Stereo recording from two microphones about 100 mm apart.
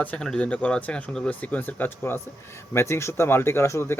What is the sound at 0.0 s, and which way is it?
Speech, 15° left (ahead or behind).